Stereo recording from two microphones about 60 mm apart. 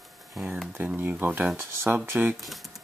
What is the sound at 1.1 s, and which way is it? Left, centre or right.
Speech, right.